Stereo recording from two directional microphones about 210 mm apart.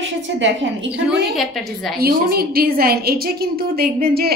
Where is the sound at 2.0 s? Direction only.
45° right (ahead or behind).